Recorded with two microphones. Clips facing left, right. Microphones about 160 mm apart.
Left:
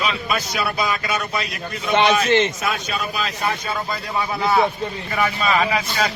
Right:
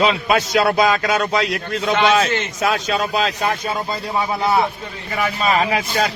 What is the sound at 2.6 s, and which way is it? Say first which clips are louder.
Speech: right 5 dB; 90° right.